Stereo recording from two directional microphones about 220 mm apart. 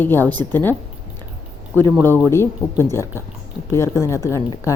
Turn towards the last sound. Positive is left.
turn(degrees=15)  # may be behind; listen again after turning